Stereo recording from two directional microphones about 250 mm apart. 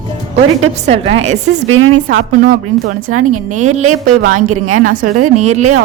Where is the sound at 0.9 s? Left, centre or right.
Right.